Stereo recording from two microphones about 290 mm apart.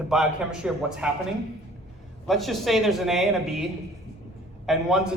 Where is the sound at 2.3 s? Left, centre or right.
Centre.